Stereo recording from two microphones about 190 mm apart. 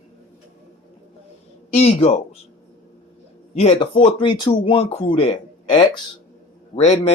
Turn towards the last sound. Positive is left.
turn(degrees=35)  # may be behind; listen again after turning